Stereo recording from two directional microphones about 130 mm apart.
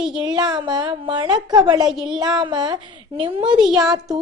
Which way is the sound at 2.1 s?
35° right (ahead or behind).